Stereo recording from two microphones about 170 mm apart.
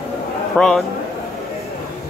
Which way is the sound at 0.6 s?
10° left (ahead or behind).